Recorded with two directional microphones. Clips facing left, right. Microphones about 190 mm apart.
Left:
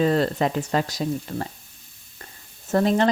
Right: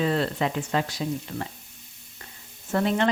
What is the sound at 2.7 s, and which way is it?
Speech, 40° left (ahead or behind).